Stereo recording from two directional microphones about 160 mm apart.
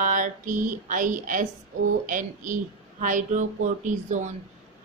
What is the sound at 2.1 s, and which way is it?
A woman's voice, 55° right (ahead or behind).